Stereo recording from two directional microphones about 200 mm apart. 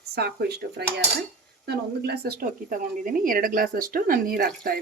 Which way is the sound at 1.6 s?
55° right (ahead or behind).